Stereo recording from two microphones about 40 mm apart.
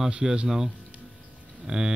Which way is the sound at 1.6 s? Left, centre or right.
Centre.